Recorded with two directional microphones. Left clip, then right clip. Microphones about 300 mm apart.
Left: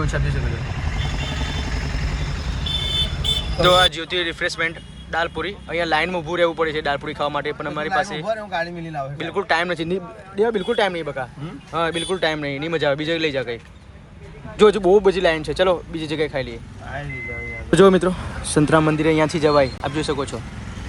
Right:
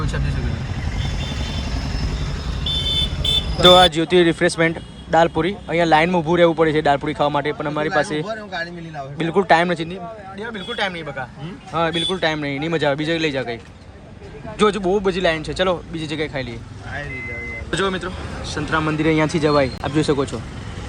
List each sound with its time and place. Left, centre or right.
0.9 s vehicle: right
3.6 s speech: centre
9.1 s speech: centre
10.3 s speech: centre
14.6 s speech: centre
17.7 s speech: centre